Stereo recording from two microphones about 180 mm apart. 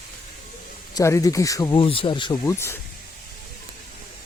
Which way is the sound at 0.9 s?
15° left (ahead or behind).